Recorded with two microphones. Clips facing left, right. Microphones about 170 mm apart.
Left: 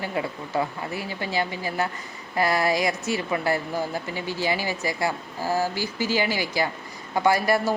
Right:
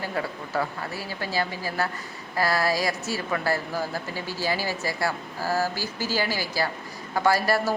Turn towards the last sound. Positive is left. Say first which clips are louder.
# left 1 dB
turn(degrees=15)  # may be behind; listen again after turning